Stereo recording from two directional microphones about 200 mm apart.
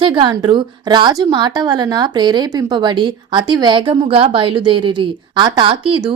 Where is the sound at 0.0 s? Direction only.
25° right (ahead or behind).